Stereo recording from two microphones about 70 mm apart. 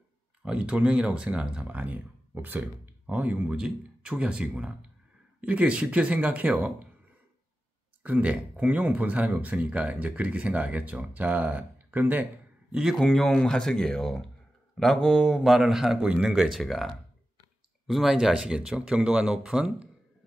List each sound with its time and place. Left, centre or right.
0.4 s speech: centre
8.0 s speech: right
12.9 s a man's voice: centre